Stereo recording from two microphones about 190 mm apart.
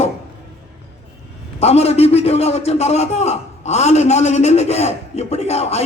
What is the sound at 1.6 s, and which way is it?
A man's voice, 35° left (ahead or behind).